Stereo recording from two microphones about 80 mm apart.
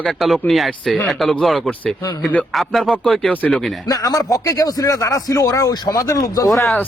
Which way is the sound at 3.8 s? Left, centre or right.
Left.